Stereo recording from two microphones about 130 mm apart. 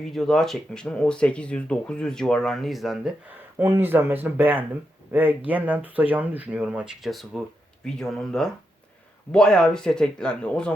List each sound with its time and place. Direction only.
0.0 s speech: 5° left (ahead or behind)
3.6 s speech: 15° right (ahead or behind); by 10.8 s 5° left (ahead or behind)